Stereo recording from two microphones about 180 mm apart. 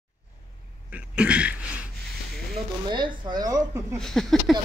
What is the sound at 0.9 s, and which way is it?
Cough, 5° right (ahead or behind).